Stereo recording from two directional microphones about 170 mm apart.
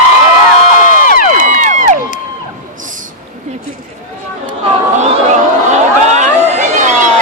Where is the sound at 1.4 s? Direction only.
45° right (ahead or behind).